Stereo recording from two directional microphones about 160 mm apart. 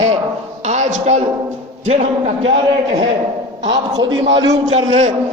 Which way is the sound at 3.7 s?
25° right (ahead or behind).